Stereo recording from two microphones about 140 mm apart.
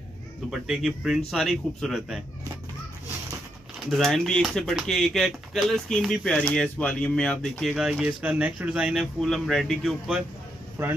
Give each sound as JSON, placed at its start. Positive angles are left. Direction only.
{"t": 0.5, "sound": "speech", "side_deg": -5}
{"t": 3.9, "sound": "speech", "side_deg": 0}
{"t": 10.8, "sound": "speech", "side_deg": -15}